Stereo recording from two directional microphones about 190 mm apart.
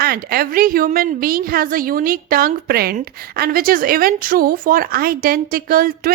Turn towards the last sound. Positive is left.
turn(degrees=-50)  # may be behind; listen again after turning